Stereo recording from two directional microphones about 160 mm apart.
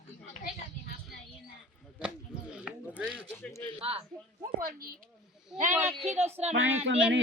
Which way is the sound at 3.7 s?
40° right (ahead or behind).